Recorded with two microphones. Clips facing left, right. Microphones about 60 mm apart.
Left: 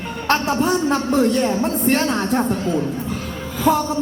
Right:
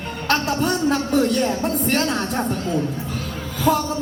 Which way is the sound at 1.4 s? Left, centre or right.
Left.